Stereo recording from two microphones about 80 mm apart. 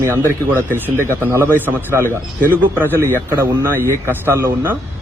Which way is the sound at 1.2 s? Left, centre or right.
Right.